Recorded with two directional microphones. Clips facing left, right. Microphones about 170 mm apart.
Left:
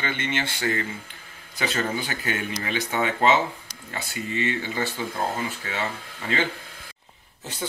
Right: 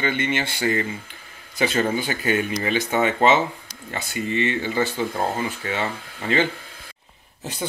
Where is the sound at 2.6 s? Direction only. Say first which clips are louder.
Right 2 dB; 20° right (ahead or behind).